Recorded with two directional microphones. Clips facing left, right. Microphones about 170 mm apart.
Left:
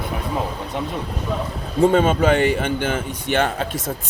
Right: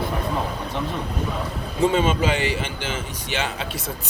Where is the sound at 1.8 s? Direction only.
50° left (ahead or behind).